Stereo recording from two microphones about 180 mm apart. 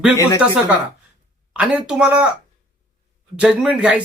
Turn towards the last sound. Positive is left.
turn(degrees=-5)  # may be behind; listen again after turning